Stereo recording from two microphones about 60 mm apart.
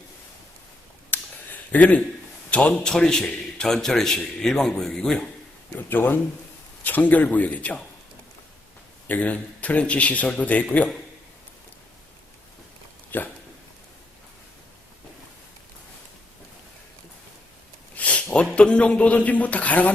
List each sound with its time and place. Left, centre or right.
1.1 s a sound: left
2.5 s speech: left
2.8 s a man's voice: centre
5.7 s a man's voice: left
9.0 s speech: left
13.1 s a sound: left
17.9 s speech: left